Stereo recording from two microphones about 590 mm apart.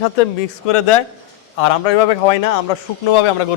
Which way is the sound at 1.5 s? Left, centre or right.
Left.